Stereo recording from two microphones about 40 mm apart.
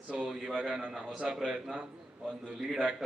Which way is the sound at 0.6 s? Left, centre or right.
Centre.